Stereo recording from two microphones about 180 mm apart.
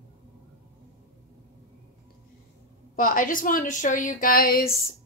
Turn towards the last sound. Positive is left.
turn(degrees=55)  # may be behind; listen again after turning